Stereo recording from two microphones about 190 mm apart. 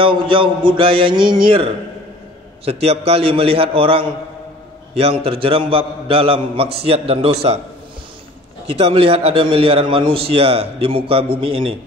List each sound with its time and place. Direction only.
0.0 s a man's voice: 25° right (ahead or behind)
8.6 s a man's voice: 30° right (ahead or behind)